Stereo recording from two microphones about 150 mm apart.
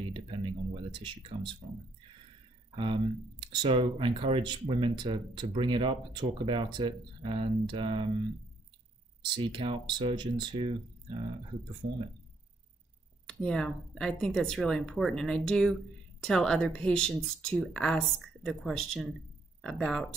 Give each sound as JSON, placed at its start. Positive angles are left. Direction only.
{"t": 0.0, "sound": "a sound", "side_deg": -35}
{"t": 2.7, "sound": "speech", "side_deg": -35}
{"t": 9.2, "sound": "speech", "side_deg": -35}
{"t": 13.3, "sound": "speech", "side_deg": 5}